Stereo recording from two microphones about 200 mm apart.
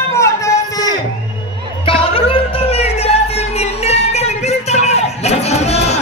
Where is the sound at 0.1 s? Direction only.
15° left (ahead or behind).